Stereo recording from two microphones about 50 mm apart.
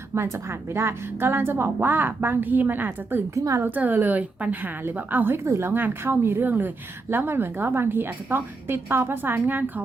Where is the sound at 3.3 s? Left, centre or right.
Right.